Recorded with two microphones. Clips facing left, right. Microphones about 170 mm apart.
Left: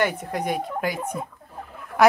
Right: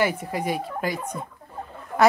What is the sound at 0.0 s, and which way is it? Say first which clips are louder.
Speech: even; centre (ahead or behind).